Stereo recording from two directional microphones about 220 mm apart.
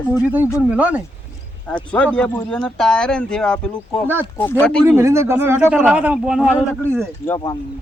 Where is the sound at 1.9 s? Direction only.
5° left (ahead or behind).